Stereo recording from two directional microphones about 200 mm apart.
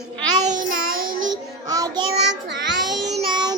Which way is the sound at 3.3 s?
20° right (ahead or behind).